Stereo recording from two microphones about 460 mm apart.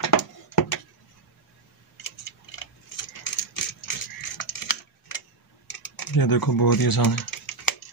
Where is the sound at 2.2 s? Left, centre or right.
Left.